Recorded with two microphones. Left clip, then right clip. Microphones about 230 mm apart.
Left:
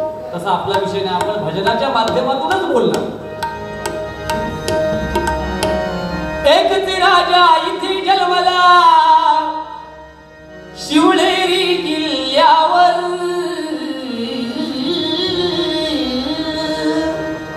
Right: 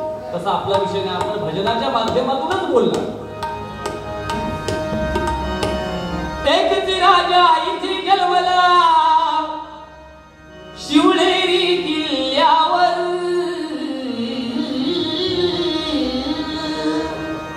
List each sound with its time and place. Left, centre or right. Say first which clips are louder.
0.5 s speech: left 2 dB; left
4.3 s music: left 5 dB; left
6.4 s singing: left 4 dB; left
10.9 s music: left 2 dB; left